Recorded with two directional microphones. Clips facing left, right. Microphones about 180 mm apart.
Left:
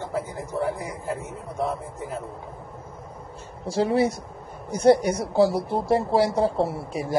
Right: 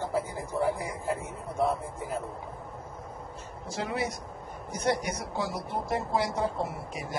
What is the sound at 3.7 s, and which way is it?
A woman's voice, 30° left (ahead or behind).